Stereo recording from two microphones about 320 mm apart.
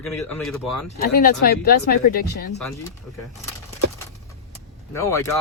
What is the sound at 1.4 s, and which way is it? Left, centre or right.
Speech, left.